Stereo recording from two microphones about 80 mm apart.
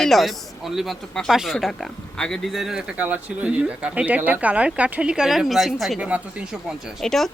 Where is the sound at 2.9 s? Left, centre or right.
Centre.